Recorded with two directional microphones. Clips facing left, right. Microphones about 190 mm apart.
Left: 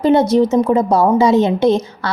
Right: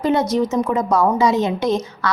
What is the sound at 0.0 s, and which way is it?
A woman's voice, 30° left (ahead or behind).